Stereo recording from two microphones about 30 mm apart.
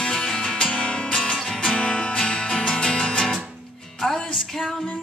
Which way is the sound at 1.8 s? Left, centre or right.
Left.